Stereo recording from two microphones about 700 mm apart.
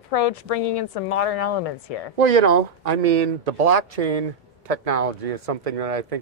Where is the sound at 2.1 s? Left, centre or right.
Right.